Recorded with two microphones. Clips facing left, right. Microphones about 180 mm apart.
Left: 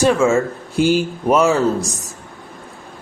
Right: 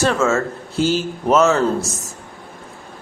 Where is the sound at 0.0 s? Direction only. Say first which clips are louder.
Left 3 dB; 15° left (ahead or behind).